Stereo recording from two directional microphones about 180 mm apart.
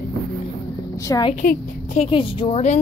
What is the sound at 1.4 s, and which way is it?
Speech, 40° left (ahead or behind).